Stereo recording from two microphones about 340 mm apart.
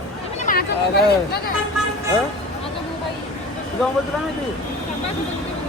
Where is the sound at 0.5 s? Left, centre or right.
Left.